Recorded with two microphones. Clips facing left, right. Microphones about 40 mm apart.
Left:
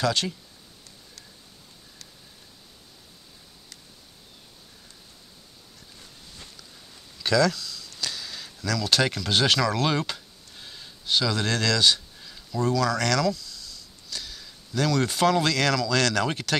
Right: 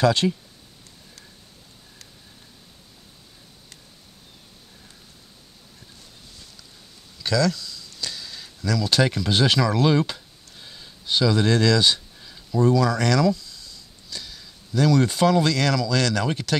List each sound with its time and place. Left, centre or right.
0.0 s speech: centre
7.2 s speech: centre